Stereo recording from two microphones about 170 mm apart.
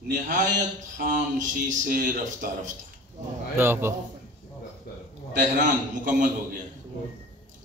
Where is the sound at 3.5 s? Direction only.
15° right (ahead or behind).